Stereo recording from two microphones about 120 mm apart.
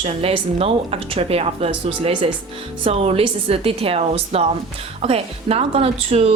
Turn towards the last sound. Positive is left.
turn(degrees=-60)  # may be behind; listen again after turning